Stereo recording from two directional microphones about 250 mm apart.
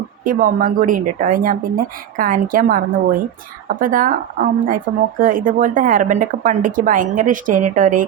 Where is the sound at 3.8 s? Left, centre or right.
Right.